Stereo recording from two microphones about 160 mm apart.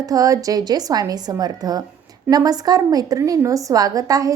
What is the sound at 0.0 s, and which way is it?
A woman's voice, 20° right (ahead or behind).